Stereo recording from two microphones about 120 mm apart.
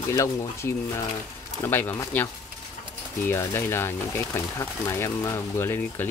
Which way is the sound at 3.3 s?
20° left (ahead or behind).